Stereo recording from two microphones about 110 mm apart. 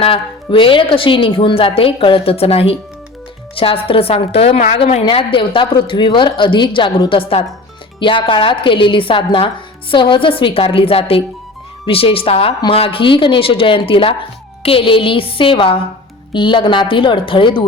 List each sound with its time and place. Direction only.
0.0 s a woman's voice: 55° left (ahead or behind); by 5.0 s 80° left
5.0 s a woman's voice: 50° left (ahead or behind)